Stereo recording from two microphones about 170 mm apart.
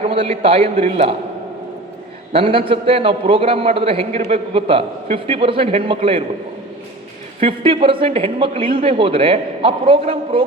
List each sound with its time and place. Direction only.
0.0 s a man's voice: 35° right (ahead or behind)
2.3 s a man's voice: 30° right (ahead or behind)
7.3 s a man's voice: 35° right (ahead or behind)